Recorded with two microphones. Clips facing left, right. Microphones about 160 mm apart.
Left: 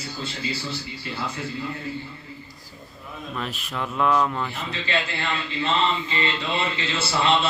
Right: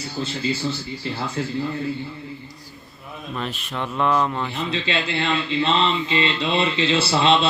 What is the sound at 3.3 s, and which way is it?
Speech, centre (ahead or behind).